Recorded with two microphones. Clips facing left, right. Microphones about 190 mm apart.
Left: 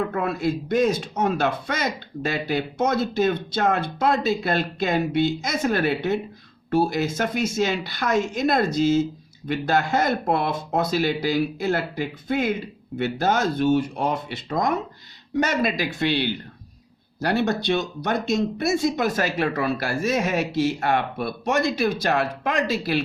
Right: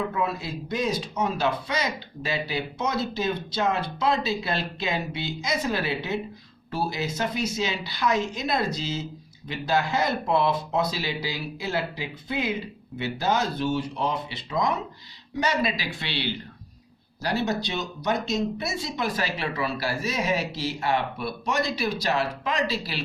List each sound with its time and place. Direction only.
0.1 s speech: 55° left (ahead or behind)